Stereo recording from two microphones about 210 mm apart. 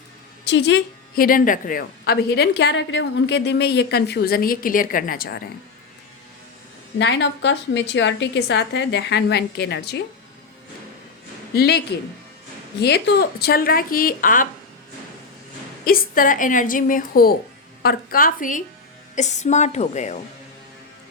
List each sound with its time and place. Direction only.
0.4 s a woman's voice: 60° left (ahead or behind)
7.0 s a woman's voice: 55° left (ahead or behind)
11.5 s a woman's voice: 50° left (ahead or behind)
12.8 s a woman's voice: 50° left (ahead or behind)
15.8 s a woman's voice: 45° left (ahead or behind)